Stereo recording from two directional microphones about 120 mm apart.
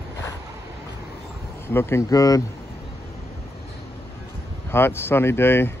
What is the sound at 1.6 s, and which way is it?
Speech, 20° left (ahead or behind).